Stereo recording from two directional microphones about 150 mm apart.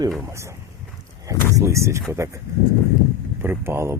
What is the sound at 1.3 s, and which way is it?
Speech, 20° right (ahead or behind).